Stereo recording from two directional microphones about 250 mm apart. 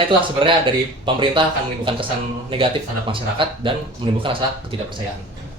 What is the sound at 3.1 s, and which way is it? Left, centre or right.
Speech, centre.